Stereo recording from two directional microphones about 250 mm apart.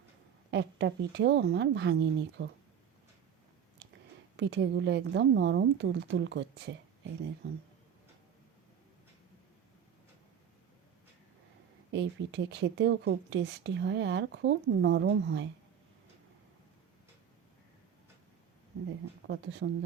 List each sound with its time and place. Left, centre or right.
0.5 s speech: right
4.4 s speech: right
11.9 s speech: right
19.3 s speech: right